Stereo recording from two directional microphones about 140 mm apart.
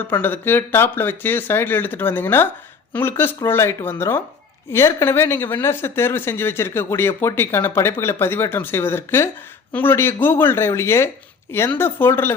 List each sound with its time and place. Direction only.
0.1 s speech: 15° left (ahead or behind)